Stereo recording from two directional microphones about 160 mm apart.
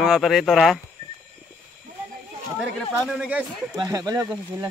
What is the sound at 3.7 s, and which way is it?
Speech, 25° right (ahead or behind).